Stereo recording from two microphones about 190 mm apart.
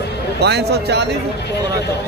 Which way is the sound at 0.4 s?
60° right (ahead or behind).